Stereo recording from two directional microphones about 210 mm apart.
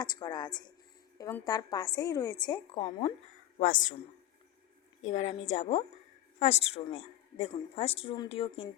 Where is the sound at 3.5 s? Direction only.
35° left (ahead or behind).